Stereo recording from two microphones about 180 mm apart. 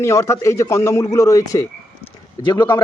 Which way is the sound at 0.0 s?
15° left (ahead or behind).